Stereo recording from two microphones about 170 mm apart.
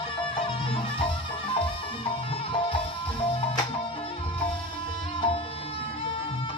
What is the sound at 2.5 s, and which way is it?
Music, 30° left (ahead or behind).